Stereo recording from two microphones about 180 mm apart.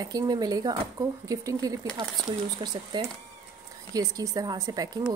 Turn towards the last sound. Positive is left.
turn(degrees=-20)  # may be behind; listen again after turning